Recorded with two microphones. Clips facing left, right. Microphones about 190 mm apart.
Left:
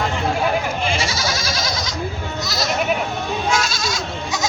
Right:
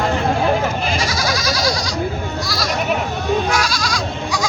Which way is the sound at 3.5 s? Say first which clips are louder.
Right 1 dB; 25° left (ahead or behind).